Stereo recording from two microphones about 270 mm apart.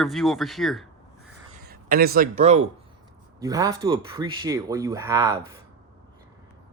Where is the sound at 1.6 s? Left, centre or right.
Right.